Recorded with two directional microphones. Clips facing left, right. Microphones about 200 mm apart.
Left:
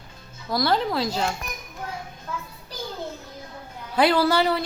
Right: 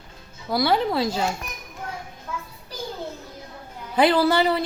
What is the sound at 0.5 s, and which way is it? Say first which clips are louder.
Speech: right 2 dB; 5° right (ahead or behind).